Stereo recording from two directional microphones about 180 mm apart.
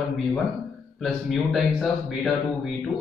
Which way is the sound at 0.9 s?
5° left (ahead or behind).